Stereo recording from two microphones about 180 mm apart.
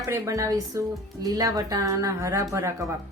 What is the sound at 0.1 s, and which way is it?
Speech, 15° right (ahead or behind).